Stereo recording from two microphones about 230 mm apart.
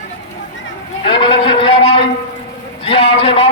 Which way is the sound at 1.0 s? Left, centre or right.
Left.